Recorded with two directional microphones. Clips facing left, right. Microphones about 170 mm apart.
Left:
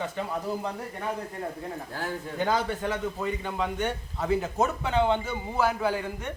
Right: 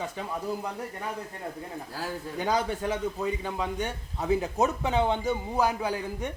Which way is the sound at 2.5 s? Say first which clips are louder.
Right 1 dB; 15° right (ahead or behind).